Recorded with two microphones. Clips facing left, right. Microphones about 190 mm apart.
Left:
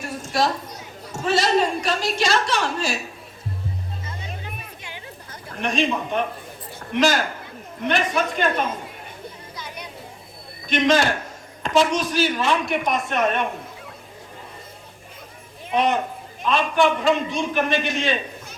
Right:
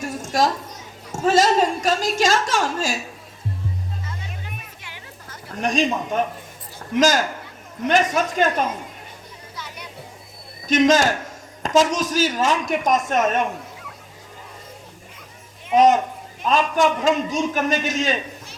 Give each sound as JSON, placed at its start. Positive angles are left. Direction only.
{"t": 0.2, "sound": "a sound", "side_deg": -45}
{"t": 1.2, "sound": "a woman's voice", "side_deg": -45}
{"t": 5.5, "sound": "a woman's voice", "side_deg": -40}
{"t": 10.7, "sound": "a woman's voice", "side_deg": -45}
{"t": 15.7, "sound": "a woman's voice", "side_deg": -45}